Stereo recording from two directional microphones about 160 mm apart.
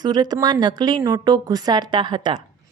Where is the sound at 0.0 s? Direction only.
25° right (ahead or behind).